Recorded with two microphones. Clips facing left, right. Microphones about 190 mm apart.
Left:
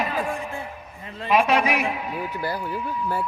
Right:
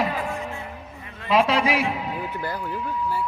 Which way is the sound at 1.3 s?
30° right (ahead or behind).